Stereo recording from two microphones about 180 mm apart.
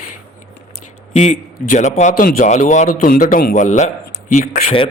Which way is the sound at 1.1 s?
40° left (ahead or behind).